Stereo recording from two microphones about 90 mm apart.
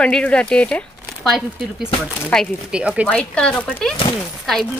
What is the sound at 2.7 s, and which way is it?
Speech, 10° right (ahead or behind).